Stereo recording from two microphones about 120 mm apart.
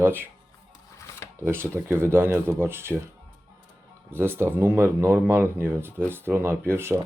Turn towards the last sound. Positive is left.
turn(degrees=-20)  # may be behind; listen again after turning